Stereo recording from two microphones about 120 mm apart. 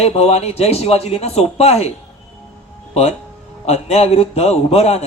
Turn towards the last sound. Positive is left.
turn(degrees=60)  # may be behind; listen again after turning